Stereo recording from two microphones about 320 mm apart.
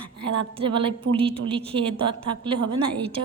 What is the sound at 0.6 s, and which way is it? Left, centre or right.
A woman's voice, centre.